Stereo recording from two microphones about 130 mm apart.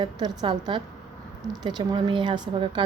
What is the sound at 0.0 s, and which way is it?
Speech, 35° right (ahead or behind).